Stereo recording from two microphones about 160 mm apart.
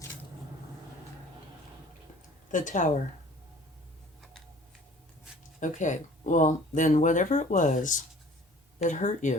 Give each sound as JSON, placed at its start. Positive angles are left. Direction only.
{"t": 2.5, "sound": "speech", "side_deg": 50}
{"t": 5.5, "sound": "speech", "side_deg": 50}